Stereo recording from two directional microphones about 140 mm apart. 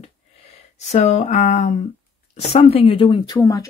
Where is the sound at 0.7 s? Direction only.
55° left (ahead or behind).